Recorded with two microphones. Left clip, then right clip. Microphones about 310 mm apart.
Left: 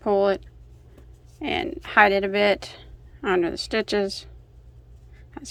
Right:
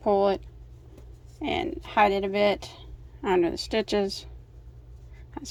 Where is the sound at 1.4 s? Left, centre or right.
Centre.